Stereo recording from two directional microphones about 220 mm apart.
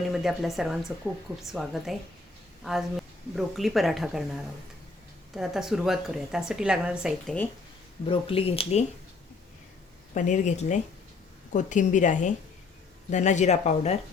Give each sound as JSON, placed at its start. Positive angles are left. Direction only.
{"t": 0.1, "sound": "a woman's voice", "side_deg": 0}
{"t": 3.3, "sound": "a woman's voice", "side_deg": 0}
{"t": 8.0, "sound": "speech", "side_deg": 25}
{"t": 10.2, "sound": "speech", "side_deg": 35}